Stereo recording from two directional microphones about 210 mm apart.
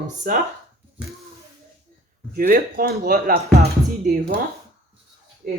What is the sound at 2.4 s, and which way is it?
Speech, 45° right (ahead or behind).